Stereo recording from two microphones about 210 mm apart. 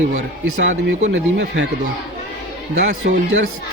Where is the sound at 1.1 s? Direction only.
55° right (ahead or behind).